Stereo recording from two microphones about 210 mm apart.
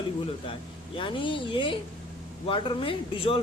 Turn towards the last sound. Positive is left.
turn(degrees=25)  # may be behind; listen again after turning